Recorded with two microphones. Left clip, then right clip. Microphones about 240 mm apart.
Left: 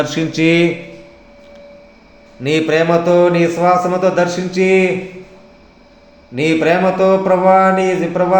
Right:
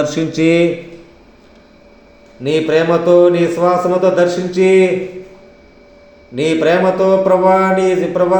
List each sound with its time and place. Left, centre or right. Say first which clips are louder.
0.0 s speech: right 1 dB; centre
2.4 s speech: right 1 dB; left
6.3 s speech: right 1 dB; left